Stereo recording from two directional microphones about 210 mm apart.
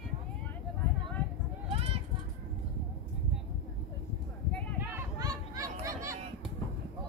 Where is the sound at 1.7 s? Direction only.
30° right (ahead or behind).